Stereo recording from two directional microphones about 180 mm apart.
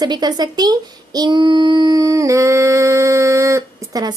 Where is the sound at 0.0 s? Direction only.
25° right (ahead or behind).